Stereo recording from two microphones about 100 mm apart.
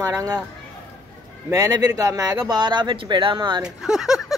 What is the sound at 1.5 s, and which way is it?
Speech, 35° right (ahead or behind).